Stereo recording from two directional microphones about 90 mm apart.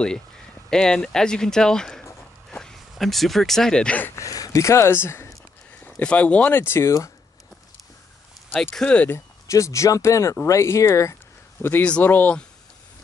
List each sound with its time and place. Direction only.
0.7 s speech: 5° left (ahead or behind)
4.0 s speech: 35° left (ahead or behind)
5.7 s a sound: 20° left (ahead or behind)
6.0 s speech: 15° left (ahead or behind)
8.7 s speech: 10° left (ahead or behind)
9.1 s speech: 35° left (ahead or behind)
11.8 s speech: 15° left (ahead or behind)